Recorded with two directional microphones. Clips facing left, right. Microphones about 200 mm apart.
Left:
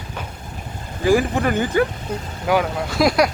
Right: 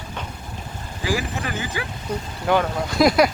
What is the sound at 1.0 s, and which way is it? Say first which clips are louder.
Speech: left 9 dB; 50° left (ahead or behind).